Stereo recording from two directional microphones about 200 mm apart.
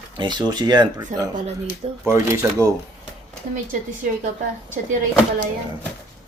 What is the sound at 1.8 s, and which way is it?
Speech, 30° right (ahead or behind).